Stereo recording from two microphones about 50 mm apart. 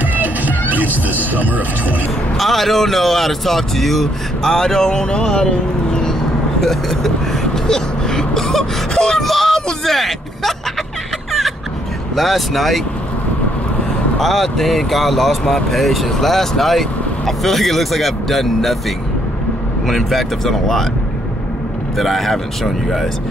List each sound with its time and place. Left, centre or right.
0.0 s music: right
1.3 s speech: right
2.3 s speech: centre
7.5 s whimper: centre
9.8 s vehicle: centre
12.2 s speech: centre
14.1 s speech: centre
19.9 s speech: centre
21.9 s speech: centre